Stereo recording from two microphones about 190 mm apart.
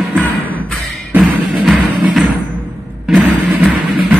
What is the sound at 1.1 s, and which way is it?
Music, centre (ahead or behind).